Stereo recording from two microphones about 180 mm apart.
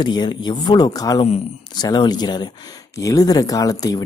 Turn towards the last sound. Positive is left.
turn(degrees=20)  # may be behind; listen again after turning